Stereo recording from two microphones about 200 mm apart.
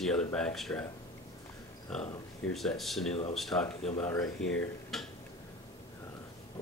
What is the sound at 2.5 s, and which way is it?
Speech, centre (ahead or behind).